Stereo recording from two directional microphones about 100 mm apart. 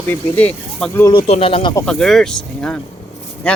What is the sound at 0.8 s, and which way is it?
Speech, 5° left (ahead or behind).